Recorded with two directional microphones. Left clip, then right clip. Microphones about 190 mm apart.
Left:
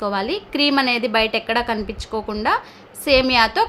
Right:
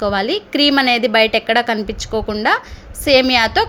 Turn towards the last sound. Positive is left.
turn(degrees=-15)  # may be behind; listen again after turning